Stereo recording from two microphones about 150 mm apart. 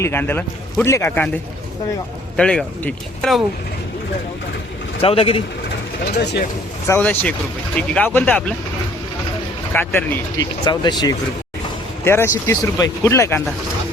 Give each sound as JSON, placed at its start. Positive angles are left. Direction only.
{"t": 0.0, "sound": "speech", "side_deg": 15}
{"t": 4.9, "sound": "speech", "side_deg": 40}
{"t": 6.8, "sound": "speech", "side_deg": 15}
{"t": 9.7, "sound": "speech", "side_deg": 15}
{"t": 10.3, "sound": "speech", "side_deg": 30}
{"t": 12.0, "sound": "speech", "side_deg": 15}